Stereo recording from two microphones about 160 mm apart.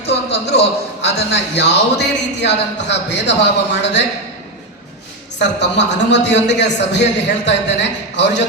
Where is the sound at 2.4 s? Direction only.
90° left.